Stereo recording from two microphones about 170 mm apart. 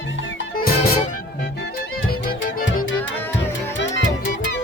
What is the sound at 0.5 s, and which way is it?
Music, 60° left (ahead or behind).